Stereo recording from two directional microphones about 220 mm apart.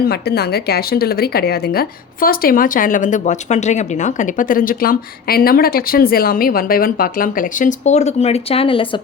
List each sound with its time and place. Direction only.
0.0 s speech: 45° left (ahead or behind); by 9.0 s 25° left (ahead or behind)